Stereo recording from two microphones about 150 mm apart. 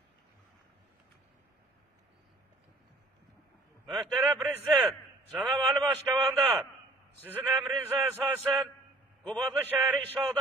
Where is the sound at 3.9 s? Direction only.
Centre (ahead or behind).